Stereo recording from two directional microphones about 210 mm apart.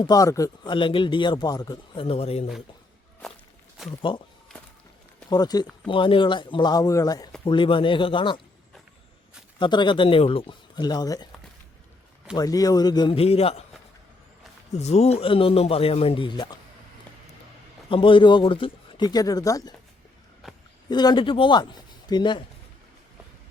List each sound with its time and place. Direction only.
0.0 s a man's voice: 15° left (ahead or behind)
4.1 s a man's voice: 25° left (ahead or behind)
5.3 s a man's voice: 20° left (ahead or behind)
9.6 s a man's voice: 20° left (ahead or behind)
12.3 s a man's voice: 15° left (ahead or behind)
14.7 s a man's voice: 30° left (ahead or behind)
17.8 s a man's voice: 25° left (ahead or behind)
20.9 s a man's voice: 20° left (ahead or behind)